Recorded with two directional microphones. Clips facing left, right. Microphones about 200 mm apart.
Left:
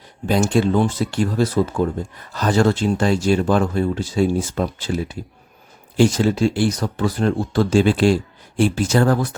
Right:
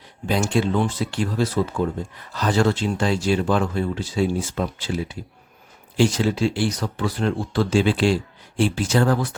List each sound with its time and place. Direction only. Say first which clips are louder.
0.3 s speech: left 4 dB; 45° left (ahead or behind)